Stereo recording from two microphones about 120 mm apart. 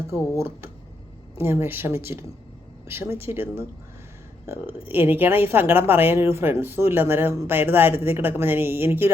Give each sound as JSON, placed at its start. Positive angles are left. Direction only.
{"t": 0.1, "sound": "a woman's voice", "side_deg": -20}